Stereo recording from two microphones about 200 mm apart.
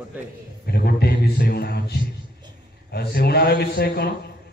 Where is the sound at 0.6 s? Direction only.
55° left (ahead or behind).